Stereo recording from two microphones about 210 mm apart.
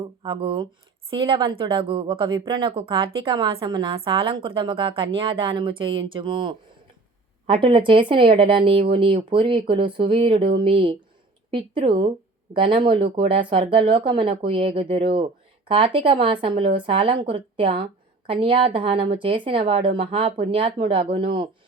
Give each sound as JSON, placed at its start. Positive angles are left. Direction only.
{"t": 0.2, "sound": "speech", "side_deg": -25}